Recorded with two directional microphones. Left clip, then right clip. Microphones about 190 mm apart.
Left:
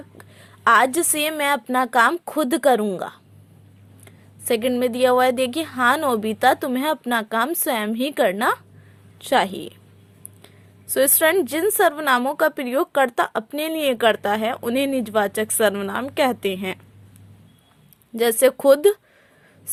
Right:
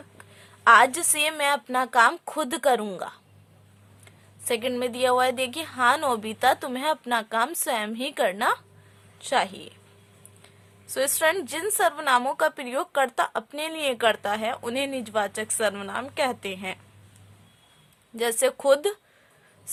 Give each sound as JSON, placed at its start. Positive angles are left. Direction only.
{"t": 0.2, "sound": "speech", "side_deg": 20}
{"t": 18.2, "sound": "speech", "side_deg": 25}